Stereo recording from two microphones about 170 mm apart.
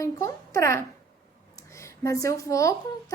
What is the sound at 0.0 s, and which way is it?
A woman's voice, 15° left (ahead or behind).